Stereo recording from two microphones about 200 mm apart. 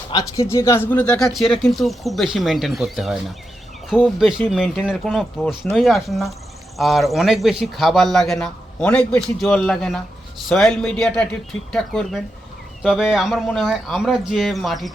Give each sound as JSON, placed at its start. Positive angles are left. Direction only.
{"t": 0.1, "sound": "speech", "side_deg": 15}